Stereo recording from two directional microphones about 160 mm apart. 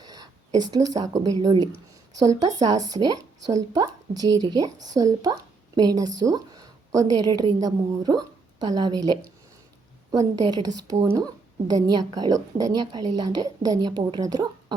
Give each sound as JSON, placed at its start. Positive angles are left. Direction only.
{"t": 0.0, "sound": "a woman's voice", "side_deg": -25}